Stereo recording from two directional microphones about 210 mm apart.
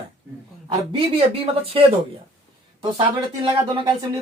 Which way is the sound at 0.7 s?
25° right (ahead or behind).